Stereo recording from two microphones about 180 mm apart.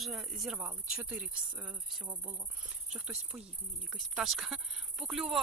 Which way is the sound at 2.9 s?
5° right (ahead or behind).